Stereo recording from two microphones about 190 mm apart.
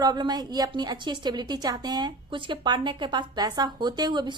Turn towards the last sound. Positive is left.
turn(degrees=-25)  # may be behind; listen again after turning